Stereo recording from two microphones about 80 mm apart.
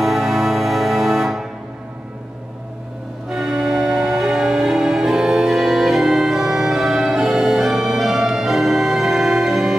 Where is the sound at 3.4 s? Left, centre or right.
Centre.